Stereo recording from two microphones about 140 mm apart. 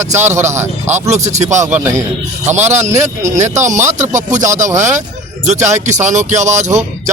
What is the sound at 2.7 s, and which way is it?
Speech, 55° right (ahead or behind).